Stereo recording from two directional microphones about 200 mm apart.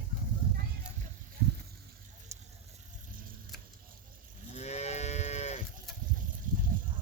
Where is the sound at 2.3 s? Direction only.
15° right (ahead or behind).